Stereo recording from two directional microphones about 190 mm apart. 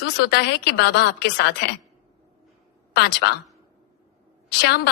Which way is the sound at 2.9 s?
55° left (ahead or behind).